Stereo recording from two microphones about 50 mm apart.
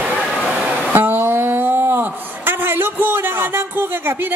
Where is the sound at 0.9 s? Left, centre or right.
Right.